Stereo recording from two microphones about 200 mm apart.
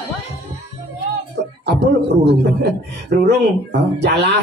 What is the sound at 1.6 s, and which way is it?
Speech, 60° right (ahead or behind).